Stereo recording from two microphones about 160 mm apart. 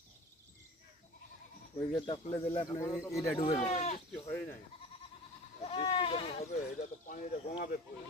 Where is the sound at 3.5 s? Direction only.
45° left (ahead or behind).